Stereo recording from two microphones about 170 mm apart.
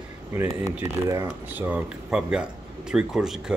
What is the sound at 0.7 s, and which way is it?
Speech, 15° right (ahead or behind).